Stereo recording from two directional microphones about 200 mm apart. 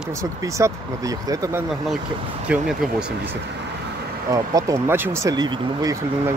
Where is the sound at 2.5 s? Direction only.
5° right (ahead or behind).